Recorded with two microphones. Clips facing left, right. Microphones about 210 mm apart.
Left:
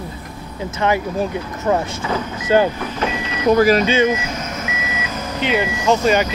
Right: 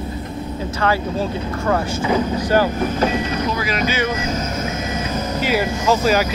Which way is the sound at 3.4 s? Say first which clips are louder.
Left 10 dB; 45° left (ahead or behind).